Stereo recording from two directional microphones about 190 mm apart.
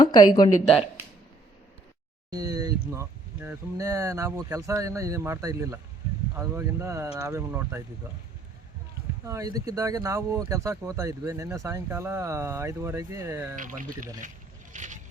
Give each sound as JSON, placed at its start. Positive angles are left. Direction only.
{"t": 0.0, "sound": "speech", "side_deg": 20}
{"t": 2.3, "sound": "speech", "side_deg": -20}
{"t": 9.2, "sound": "speech", "side_deg": -15}
{"t": 13.6, "sound": "a man's voice", "side_deg": -45}
{"t": 14.7, "sound": "vehicle", "side_deg": -40}